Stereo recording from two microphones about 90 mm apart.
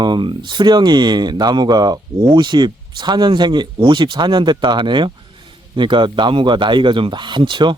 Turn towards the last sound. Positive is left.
turn(degrees=-60)  # may be behind; listen again after turning